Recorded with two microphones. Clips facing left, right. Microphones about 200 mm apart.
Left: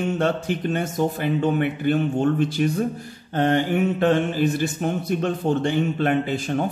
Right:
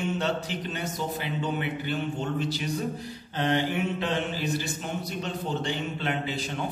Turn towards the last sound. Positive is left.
turn(degrees=50)  # may be behind; listen again after turning